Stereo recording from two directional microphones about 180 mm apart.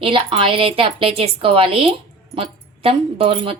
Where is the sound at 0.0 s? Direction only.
30° right (ahead or behind).